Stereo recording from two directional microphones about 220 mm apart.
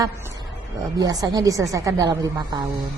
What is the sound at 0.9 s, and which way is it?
A woman's voice, 15° right (ahead or behind).